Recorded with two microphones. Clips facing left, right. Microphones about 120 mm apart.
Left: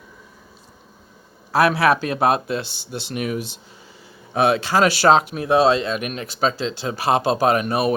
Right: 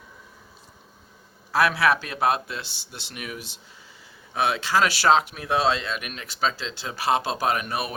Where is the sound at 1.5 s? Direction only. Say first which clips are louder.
Left 5 dB; 50° left (ahead or behind).